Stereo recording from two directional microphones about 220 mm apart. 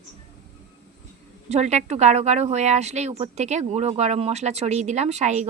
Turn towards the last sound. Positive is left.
turn(degrees=-30)  # may be behind; listen again after turning